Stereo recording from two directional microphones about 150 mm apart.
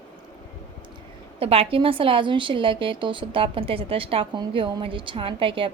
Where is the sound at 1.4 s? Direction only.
40° right (ahead or behind).